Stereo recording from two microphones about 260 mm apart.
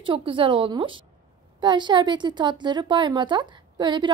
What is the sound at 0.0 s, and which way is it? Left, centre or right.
A woman's voice, centre.